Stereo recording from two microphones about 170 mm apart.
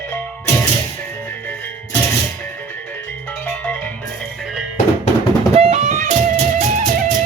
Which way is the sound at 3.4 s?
10° left (ahead or behind).